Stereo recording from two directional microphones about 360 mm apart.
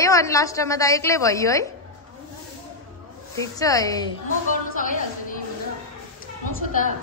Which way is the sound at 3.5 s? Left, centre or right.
Centre.